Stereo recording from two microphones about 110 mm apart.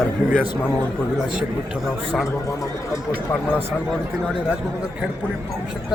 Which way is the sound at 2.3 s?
30° left (ahead or behind).